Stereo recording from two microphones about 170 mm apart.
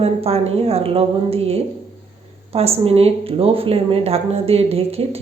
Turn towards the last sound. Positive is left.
turn(degrees=-35)  # may be behind; listen again after turning